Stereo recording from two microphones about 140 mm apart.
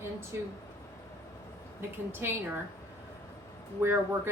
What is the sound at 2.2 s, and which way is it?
Speech, 15° right (ahead or behind).